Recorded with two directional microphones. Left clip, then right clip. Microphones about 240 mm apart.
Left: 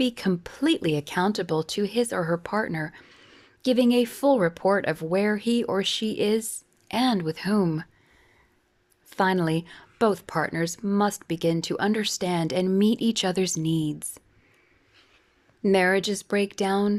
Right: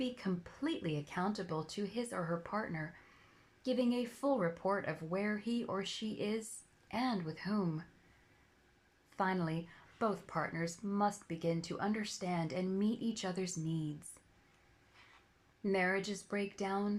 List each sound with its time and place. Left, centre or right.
0.0 s a woman's voice: left
9.0 s a woman's voice: left
15.6 s a woman's voice: left